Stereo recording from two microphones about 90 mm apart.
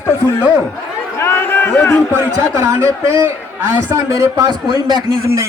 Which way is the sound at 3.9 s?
30° right (ahead or behind).